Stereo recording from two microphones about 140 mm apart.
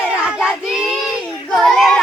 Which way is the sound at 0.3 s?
5° right (ahead or behind).